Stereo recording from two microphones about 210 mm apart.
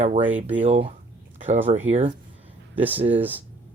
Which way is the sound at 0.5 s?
25° right (ahead or behind).